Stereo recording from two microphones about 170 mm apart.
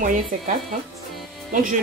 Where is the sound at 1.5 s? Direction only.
50° right (ahead or behind).